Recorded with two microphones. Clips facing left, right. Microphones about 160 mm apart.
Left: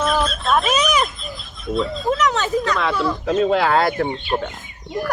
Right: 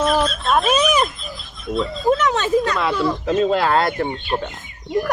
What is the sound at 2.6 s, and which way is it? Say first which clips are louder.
A man's voice: right 1 dB; 5° right (ahead or behind).